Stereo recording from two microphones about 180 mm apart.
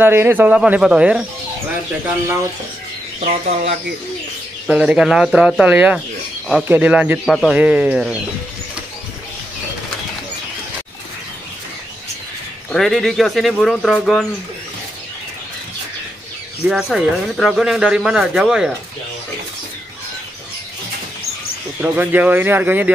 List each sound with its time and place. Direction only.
0.0 s speech: 10° right (ahead or behind)
3.2 s speech: 35° right (ahead or behind)
4.6 s speech: 5° right (ahead or behind)
12.7 s speech: centre (ahead or behind)
16.6 s speech: centre (ahead or behind)
21.8 s speech: 10° right (ahead or behind)